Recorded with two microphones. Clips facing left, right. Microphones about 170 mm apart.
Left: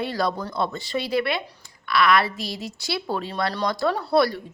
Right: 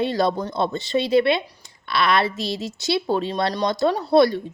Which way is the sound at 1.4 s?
10° right (ahead or behind).